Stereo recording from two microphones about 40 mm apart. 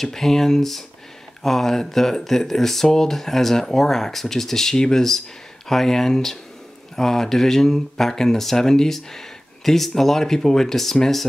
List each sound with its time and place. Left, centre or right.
0.0 s speech: centre